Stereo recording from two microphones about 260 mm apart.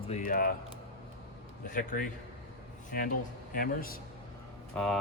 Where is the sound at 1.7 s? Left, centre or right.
Left.